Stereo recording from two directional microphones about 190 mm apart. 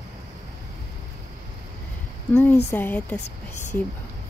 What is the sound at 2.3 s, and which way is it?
Speech, 10° left (ahead or behind).